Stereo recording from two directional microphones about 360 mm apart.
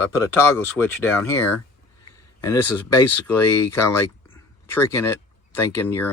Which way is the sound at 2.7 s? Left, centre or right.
Left.